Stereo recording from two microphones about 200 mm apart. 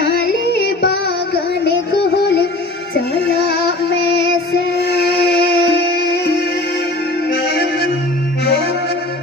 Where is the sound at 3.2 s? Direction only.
55° left (ahead or behind).